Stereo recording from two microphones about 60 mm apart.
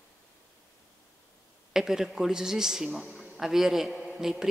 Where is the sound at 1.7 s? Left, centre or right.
Centre.